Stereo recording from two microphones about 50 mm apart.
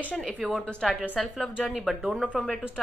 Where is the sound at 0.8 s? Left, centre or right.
Centre.